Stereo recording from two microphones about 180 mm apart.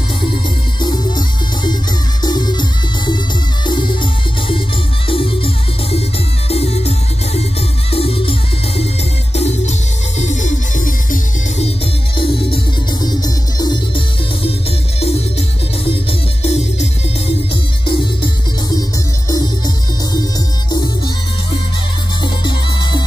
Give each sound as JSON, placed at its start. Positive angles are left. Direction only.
{"t": 0.7, "sound": "music", "side_deg": 25}
{"t": 3.6, "sound": "music", "side_deg": 25}
{"t": 7.9, "sound": "music", "side_deg": 30}
{"t": 13.0, "sound": "music", "side_deg": 20}
{"t": 15.8, "sound": "music", "side_deg": 30}
{"t": 17.8, "sound": "music", "side_deg": 25}
{"t": 22.2, "sound": "music", "side_deg": 25}